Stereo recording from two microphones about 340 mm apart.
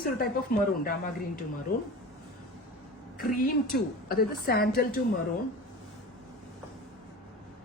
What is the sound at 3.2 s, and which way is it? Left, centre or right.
A woman's voice, left.